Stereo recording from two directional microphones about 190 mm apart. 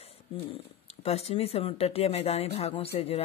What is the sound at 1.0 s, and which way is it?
Speech, 35° left (ahead or behind).